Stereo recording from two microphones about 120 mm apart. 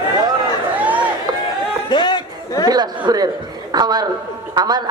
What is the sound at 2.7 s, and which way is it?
Speech, 35° right (ahead or behind).